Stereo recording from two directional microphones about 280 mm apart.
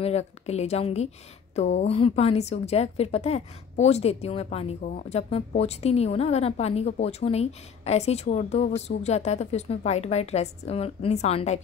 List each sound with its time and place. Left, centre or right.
0.0 s a woman's voice: left